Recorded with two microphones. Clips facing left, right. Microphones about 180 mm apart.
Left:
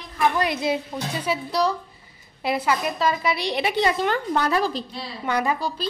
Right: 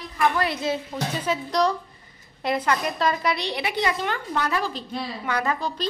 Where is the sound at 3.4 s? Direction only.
25° left (ahead or behind).